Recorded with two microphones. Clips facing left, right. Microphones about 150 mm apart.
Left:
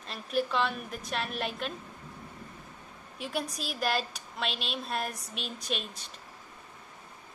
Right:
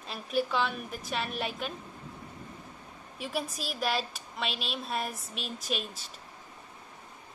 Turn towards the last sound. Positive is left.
turn(degrees=0)  # may be behind; listen again after turning